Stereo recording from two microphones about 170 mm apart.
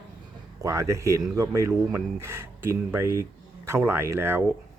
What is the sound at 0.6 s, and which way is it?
Speech, 15° right (ahead or behind).